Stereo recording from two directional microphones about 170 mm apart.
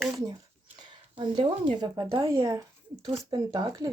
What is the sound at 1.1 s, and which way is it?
Speech, 30° right (ahead or behind).